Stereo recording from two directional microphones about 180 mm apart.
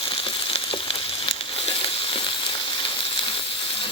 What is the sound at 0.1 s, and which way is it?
Frying, 30° left (ahead or behind).